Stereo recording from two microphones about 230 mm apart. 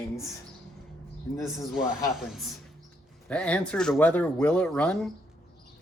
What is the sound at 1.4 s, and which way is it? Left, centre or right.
Speech, centre.